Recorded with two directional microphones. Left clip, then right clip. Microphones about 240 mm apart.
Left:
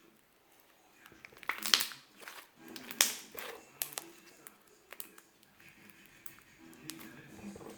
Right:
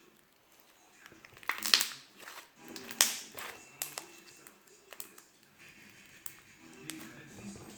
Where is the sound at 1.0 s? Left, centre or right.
Centre.